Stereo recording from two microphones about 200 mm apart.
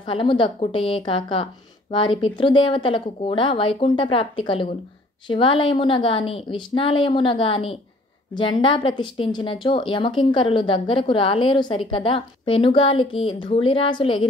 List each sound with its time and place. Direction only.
0.0 s a woman's voice: 25° left (ahead or behind)